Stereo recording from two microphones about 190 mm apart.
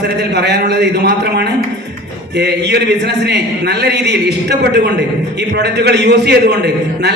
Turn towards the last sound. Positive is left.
turn(degrees=-65)  # may be behind; listen again after turning